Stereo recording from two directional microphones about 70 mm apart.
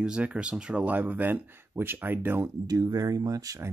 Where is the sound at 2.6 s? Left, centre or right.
Right.